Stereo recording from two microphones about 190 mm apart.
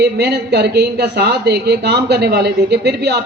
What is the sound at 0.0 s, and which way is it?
A man's voice, 65° right (ahead or behind).